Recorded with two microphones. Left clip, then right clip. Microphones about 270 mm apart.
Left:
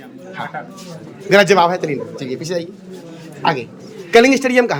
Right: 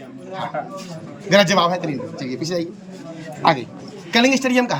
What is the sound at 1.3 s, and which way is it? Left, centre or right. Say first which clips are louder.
A man's voice: left 4 dB; centre.